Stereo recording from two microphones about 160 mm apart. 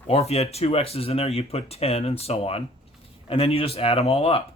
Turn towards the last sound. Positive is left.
turn(degrees=35)  # may be behind; listen again after turning